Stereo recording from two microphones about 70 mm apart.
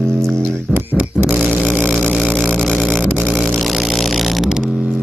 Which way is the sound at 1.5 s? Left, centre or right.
Right.